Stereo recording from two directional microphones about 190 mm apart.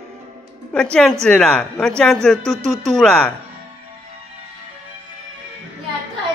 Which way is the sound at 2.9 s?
5° left (ahead or behind).